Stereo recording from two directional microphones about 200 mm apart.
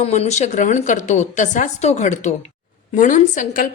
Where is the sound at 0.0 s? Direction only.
35° left (ahead or behind).